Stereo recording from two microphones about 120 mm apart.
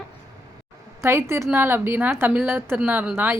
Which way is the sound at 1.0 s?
20° right (ahead or behind).